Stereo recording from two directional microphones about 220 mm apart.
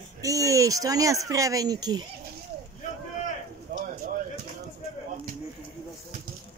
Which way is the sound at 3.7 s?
40° right (ahead or behind).